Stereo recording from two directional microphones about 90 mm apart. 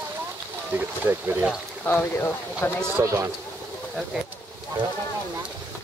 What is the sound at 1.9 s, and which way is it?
Speech, 25° left (ahead or behind).